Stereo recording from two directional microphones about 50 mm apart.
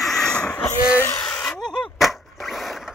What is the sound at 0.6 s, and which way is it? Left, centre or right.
Wheeze, left.